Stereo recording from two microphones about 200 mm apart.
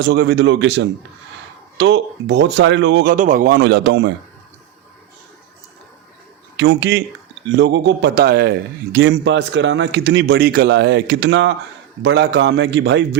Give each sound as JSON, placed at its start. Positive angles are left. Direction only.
{"t": 0.0, "sound": "a man's voice", "side_deg": -60}
{"t": 3.1, "sound": "a man's voice", "side_deg": -40}
{"t": 6.6, "sound": "a man's voice", "side_deg": -65}